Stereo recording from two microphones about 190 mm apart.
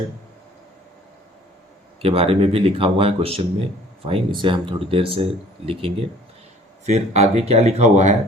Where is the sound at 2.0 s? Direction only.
30° right (ahead or behind).